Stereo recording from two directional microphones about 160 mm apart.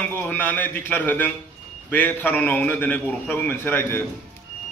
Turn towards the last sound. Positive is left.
turn(degrees=15)  # may be behind; listen again after turning